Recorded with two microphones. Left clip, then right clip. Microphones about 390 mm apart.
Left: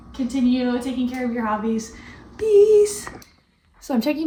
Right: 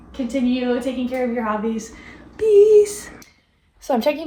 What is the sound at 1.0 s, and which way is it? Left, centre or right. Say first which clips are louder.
A woman's voice: right 3 dB; centre.